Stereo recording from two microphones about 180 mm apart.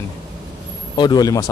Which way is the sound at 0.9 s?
25° left (ahead or behind).